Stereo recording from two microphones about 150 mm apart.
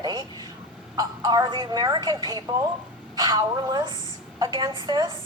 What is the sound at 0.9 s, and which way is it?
A woman's voice, 25° right (ahead or behind).